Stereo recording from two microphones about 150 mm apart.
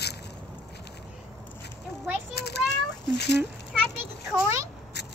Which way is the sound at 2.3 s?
90° left.